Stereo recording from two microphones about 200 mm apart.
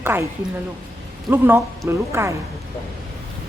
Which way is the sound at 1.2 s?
10° right (ahead or behind).